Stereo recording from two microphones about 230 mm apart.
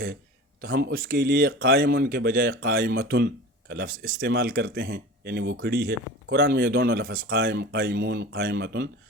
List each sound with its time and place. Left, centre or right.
0.6 s speech: right